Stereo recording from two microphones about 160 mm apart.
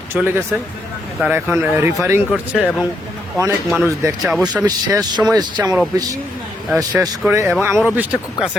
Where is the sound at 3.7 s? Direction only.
15° right (ahead or behind).